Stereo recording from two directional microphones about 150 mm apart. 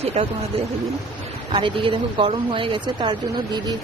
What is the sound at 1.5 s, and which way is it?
Speech, 35° right (ahead or behind).